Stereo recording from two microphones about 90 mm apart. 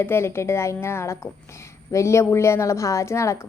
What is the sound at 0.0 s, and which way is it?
A woman's voice, 25° left (ahead or behind).